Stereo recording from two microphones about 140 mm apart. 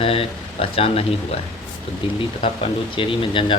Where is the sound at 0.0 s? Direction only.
40° left (ahead or behind).